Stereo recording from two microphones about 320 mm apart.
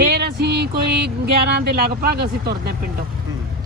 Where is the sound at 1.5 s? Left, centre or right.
Right.